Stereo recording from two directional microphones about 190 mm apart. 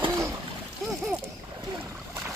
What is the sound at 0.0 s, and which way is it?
Splash, 15° right (ahead or behind).